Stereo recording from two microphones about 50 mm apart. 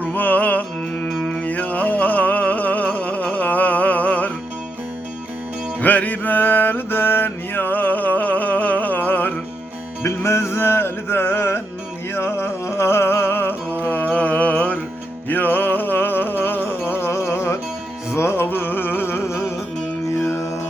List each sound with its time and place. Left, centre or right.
0.0 s music: left
5.8 s mantra: left
10.0 s music: left
18.4 s a sound: left
20.1 s music: left